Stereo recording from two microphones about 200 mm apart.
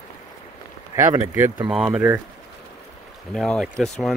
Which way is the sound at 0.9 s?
15° right (ahead or behind).